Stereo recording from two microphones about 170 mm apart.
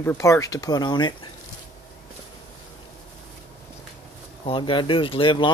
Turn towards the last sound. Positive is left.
turn(degrees=30)  # may be behind; listen again after turning